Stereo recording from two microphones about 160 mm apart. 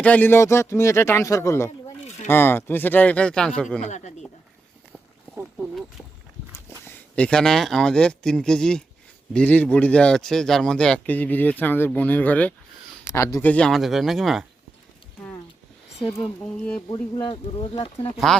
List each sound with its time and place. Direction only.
0.0 s speech: 10° left (ahead or behind)
3.8 s speech: 45° left (ahead or behind)
6.7 s speech: 15° left (ahead or behind)
16.9 s speech: 35° left (ahead or behind)